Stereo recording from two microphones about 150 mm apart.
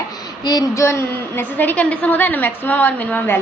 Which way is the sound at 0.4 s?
25° left (ahead or behind).